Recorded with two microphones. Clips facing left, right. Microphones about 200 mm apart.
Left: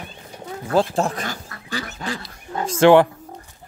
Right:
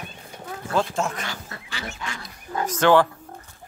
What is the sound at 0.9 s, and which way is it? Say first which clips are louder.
Speech: left 4 dB; 35° left (ahead or behind).